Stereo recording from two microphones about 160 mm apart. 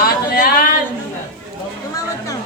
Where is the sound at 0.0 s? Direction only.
65° left (ahead or behind).